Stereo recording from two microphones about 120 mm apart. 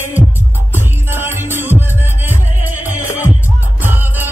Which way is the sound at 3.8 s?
15° right (ahead or behind).